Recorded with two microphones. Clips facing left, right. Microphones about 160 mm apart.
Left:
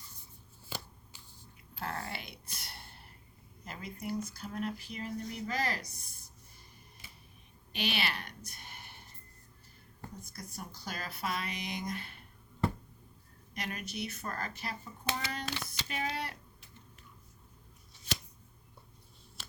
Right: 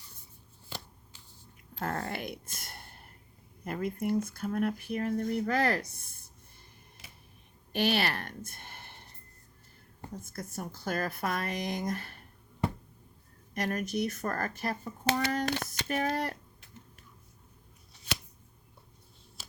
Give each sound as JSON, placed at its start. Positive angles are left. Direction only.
{"t": 1.1, "sound": "a sound", "side_deg": 10}
{"t": 1.8, "sound": "speech", "side_deg": -45}
{"t": 7.7, "sound": "a woman's voice", "side_deg": -50}
{"t": 10.3, "sound": "speech", "side_deg": -50}
{"t": 13.5, "sound": "speech", "side_deg": -45}